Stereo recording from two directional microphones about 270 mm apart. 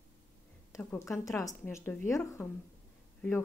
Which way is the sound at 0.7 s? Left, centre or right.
Centre.